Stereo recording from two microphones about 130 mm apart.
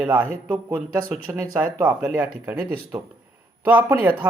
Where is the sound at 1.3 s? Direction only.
15° right (ahead or behind).